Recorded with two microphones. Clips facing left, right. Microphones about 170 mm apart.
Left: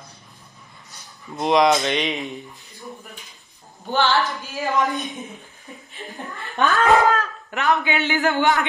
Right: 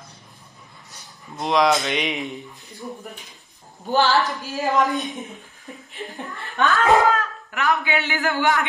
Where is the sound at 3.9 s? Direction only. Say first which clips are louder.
Right 1 dB; 40° right (ahead or behind).